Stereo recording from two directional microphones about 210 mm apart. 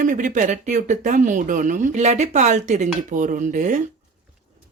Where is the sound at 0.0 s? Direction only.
35° right (ahead or behind).